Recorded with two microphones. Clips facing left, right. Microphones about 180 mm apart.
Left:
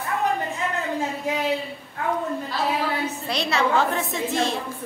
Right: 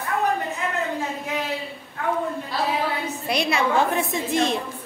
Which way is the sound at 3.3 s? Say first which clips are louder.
Right 1 dB; 10° right (ahead or behind).